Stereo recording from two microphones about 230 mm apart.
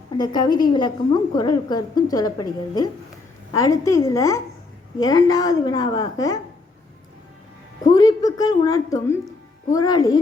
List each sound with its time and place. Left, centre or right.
0.2 s a woman's voice: centre
7.9 s a woman's voice: centre